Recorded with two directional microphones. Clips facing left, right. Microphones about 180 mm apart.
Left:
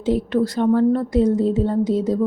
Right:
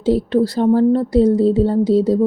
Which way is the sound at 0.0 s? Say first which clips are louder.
Right 4 dB; 35° right (ahead or behind).